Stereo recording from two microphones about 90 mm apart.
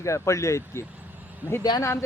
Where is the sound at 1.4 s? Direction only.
20° right (ahead or behind).